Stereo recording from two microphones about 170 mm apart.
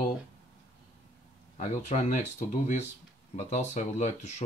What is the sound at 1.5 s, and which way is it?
Speech, 45° left (ahead or behind).